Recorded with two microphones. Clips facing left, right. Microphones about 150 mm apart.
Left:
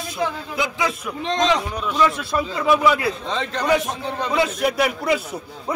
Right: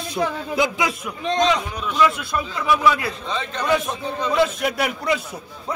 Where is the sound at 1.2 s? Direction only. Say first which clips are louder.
Right 1 dB; 90° left.